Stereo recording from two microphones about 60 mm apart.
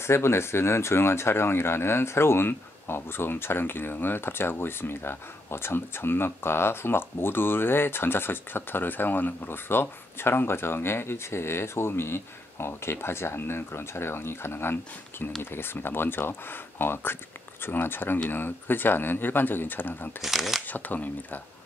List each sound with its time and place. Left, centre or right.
0.0 s speech: left
20.2 s speech: centre
20.6 s speech: left